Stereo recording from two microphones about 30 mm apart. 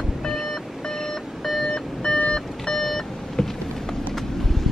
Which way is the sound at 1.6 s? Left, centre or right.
Left.